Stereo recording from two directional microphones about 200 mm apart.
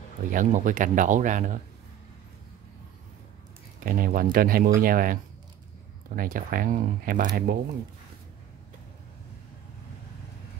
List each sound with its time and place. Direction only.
0.3 s speech: 40° right (ahead or behind)
3.8 s speech: 45° right (ahead or behind)